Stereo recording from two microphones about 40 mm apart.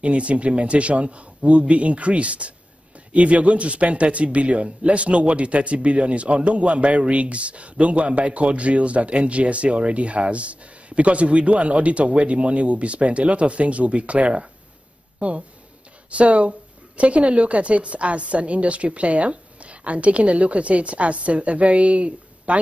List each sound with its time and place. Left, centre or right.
0.0 s speech: right